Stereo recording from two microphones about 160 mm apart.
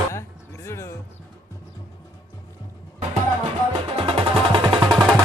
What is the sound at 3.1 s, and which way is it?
Music, 35° right (ahead or behind).